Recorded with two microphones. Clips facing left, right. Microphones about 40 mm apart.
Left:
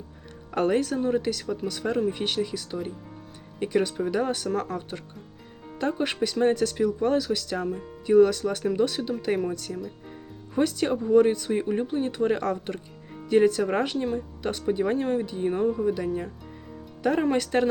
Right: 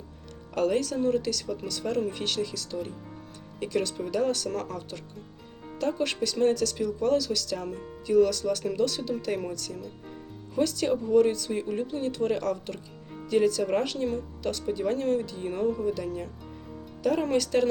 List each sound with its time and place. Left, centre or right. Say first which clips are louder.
0.5 s speech: left 2 dB; left
0.9 s speech: left 1 dB; left
4.4 s speech: left 4 dB; centre
5.8 s speech: left 2 dB; left
7.6 s speech: left 5 dB; centre
8.0 s speech: left 4 dB; left
14.9 s speech: left 1 dB; centre
15.7 s speech: left 3 dB; centre
17.0 s speech: left 2 dB; left